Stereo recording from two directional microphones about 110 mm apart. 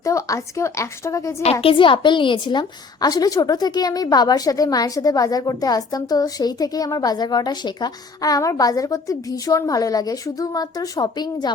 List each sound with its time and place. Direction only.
0.0 s a woman's voice: 30° left (ahead or behind)
1.6 s a woman's voice: 50° left (ahead or behind)